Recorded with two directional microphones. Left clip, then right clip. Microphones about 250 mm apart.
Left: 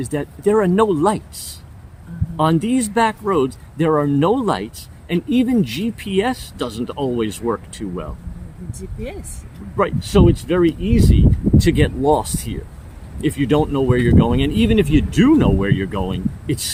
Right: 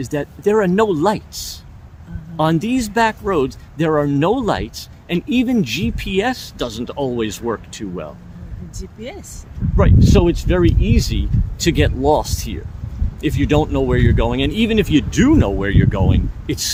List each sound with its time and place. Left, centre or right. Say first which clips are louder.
0.0 s speech: right 1 dB; centre
9.7 s speech: right 1 dB; centre